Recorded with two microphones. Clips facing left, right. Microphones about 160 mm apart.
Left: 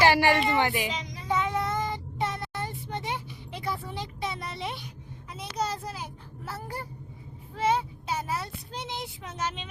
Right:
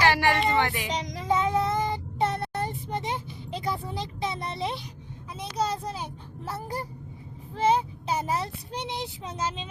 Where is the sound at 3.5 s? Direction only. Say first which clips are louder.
Right 3 dB; 25° right (ahead or behind).